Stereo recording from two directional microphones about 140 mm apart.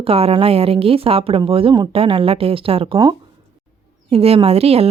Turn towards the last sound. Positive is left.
turn(degrees=-45)  # may be behind; listen again after turning